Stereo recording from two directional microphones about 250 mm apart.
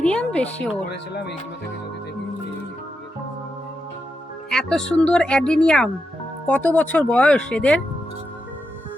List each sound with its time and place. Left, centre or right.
0.0 s speech: centre
0.9 s speech: left
4.4 s speech: centre